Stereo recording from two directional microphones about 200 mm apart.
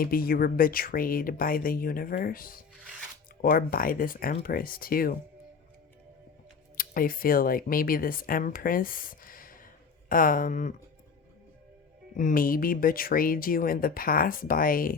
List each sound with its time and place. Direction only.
0.0 s speech: 45° left (ahead or behind)
6.7 s speech: 45° left (ahead or behind)
12.1 s speech: 45° left (ahead or behind)